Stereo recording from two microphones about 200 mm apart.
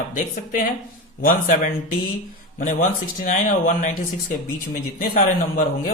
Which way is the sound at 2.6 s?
40° left (ahead or behind).